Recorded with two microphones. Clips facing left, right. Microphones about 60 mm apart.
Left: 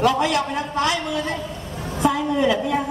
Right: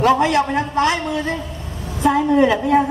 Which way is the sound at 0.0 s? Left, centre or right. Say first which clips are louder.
Right 4 dB; right.